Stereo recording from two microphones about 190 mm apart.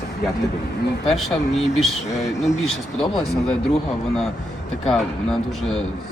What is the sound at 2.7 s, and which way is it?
Speech, centre (ahead or behind).